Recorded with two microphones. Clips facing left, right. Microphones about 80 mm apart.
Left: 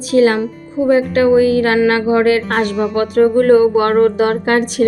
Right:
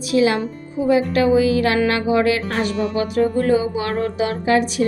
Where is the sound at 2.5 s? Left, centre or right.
Left.